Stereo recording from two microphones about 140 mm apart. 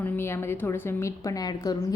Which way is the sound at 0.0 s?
15° left (ahead or behind).